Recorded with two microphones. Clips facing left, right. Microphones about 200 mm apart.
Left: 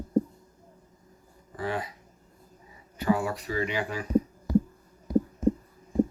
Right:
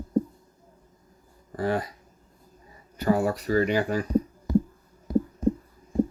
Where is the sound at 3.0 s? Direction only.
40° right (ahead or behind).